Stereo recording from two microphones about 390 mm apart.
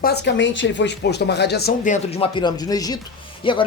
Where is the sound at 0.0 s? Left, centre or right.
Left.